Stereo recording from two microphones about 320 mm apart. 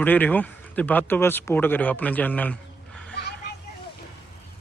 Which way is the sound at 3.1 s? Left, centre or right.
Left.